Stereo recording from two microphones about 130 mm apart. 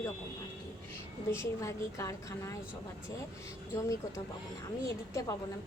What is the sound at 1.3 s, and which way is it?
A woman's voice, 20° left (ahead or behind).